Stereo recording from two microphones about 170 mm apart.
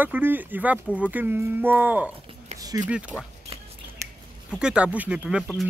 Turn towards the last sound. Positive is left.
turn(degrees=-5)  # may be behind; listen again after turning